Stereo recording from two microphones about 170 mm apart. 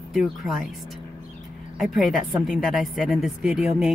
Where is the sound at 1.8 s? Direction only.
Centre (ahead or behind).